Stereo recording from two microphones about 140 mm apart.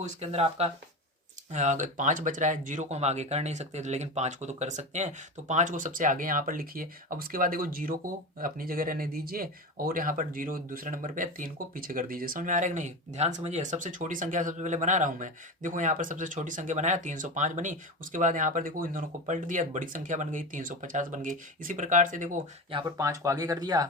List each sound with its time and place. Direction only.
0.0 s speech: 50° right (ahead or behind)
1.5 s speech: 60° right (ahead or behind)
23.0 s speech: 20° right (ahead or behind)